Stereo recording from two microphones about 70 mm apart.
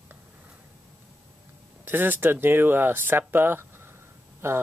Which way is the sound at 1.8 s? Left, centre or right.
Right.